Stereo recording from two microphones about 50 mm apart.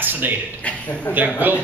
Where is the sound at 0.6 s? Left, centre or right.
Left.